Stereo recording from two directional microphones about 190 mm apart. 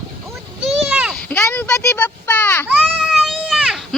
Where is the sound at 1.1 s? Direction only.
5° left (ahead or behind).